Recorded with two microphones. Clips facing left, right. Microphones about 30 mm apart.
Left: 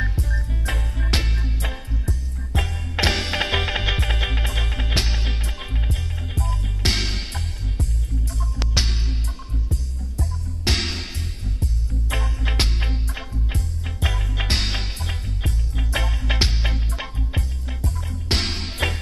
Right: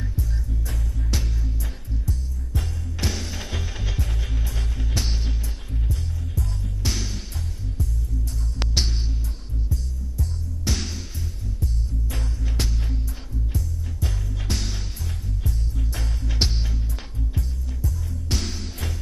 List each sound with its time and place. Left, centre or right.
0.5 s music: left
8.8 s music: left